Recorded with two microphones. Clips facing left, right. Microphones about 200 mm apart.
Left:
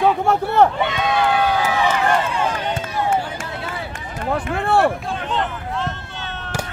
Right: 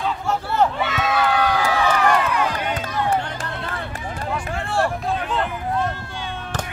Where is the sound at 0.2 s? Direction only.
60° left (ahead or behind).